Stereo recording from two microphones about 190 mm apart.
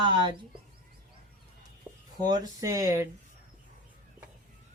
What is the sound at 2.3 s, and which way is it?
Speech, 20° right (ahead or behind).